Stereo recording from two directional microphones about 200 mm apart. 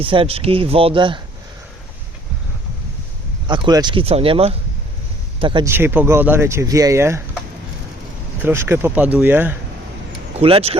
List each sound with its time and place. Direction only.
0.0 s speech: 25° right (ahead or behind)
3.4 s speech: 25° right (ahead or behind)
5.6 s speech: 10° right (ahead or behind)
8.4 s speech: 10° right (ahead or behind)
10.3 s speech: 30° right (ahead or behind)